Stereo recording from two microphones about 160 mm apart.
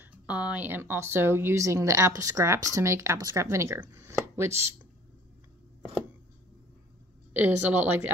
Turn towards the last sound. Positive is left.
turn(degrees=-10)  # may be behind; listen again after turning